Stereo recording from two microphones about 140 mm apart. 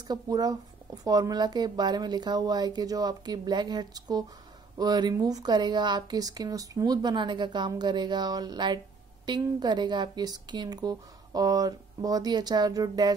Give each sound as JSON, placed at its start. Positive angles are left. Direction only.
{"t": 0.1, "sound": "speech", "side_deg": -25}